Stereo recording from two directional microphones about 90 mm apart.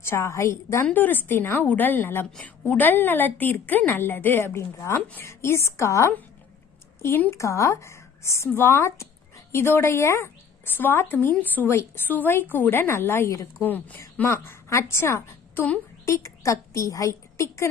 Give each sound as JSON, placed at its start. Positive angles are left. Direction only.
{"t": 0.0, "sound": "speech", "side_deg": 30}
{"t": 0.8, "sound": "a woman's voice", "side_deg": 20}
{"t": 7.2, "sound": "a woman's voice", "side_deg": 30}